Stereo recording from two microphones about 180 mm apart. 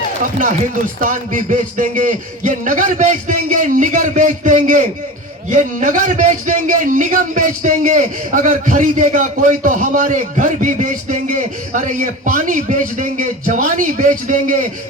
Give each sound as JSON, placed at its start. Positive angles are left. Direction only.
{"t": 0.9, "sound": "a man's voice", "side_deg": -50}